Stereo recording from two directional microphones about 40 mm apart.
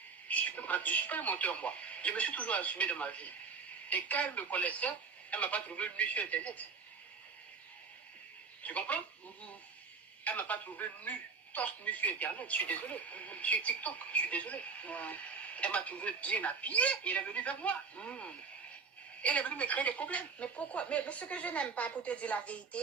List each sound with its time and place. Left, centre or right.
0.3 s speech: left
8.6 s speech: left
10.2 s speech: left